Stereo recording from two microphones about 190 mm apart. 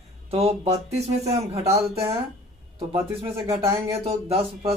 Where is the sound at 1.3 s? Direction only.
15° right (ahead or behind).